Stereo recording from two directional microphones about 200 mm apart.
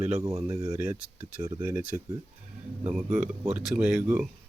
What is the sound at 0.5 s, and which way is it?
Speech, 15° right (ahead or behind).